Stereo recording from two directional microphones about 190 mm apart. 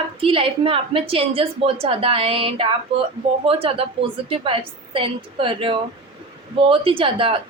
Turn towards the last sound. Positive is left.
turn(degrees=-30)  # may be behind; listen again after turning